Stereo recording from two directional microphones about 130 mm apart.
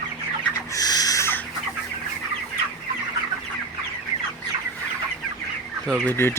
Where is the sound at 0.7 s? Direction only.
30° left (ahead or behind).